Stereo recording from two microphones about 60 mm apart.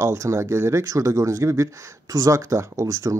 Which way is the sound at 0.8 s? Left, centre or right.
Right.